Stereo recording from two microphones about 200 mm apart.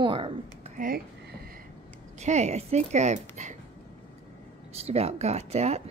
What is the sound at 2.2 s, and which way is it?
A woman's voice, 35° right (ahead or behind).